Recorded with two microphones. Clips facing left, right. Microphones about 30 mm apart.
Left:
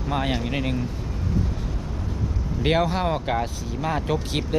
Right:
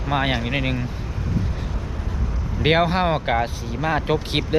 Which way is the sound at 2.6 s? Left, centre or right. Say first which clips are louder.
Right 4 dB; right.